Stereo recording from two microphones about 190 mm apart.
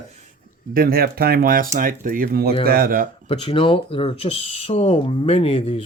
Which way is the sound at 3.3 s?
25° left (ahead or behind).